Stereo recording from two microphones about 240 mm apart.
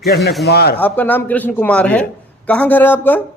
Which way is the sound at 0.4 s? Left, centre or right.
Left.